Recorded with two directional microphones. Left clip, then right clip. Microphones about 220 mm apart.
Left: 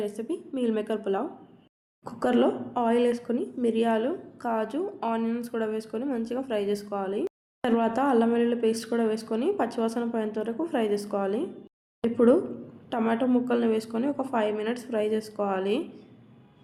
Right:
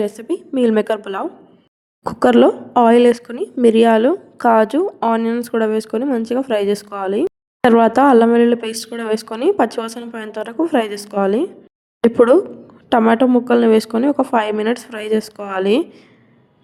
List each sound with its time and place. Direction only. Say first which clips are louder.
0.0 s speech: right 10 dB; 40° right (ahead or behind)